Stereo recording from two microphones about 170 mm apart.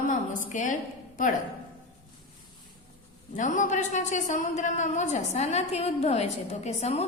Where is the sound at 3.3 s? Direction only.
45° left (ahead or behind).